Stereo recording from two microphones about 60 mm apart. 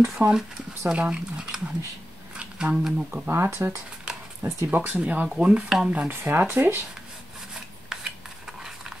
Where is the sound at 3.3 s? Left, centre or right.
Right.